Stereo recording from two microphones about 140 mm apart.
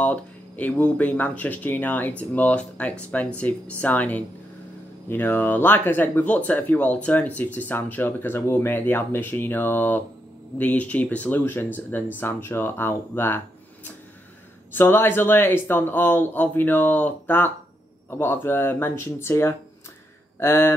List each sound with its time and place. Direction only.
0.0 s speech: 10° left (ahead or behind)
14.7 s speech: 15° left (ahead or behind)